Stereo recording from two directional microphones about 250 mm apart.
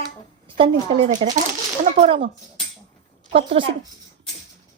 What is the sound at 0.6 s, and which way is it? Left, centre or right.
Speech, right.